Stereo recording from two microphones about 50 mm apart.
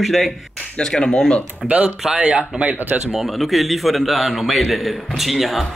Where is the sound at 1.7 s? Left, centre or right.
Right.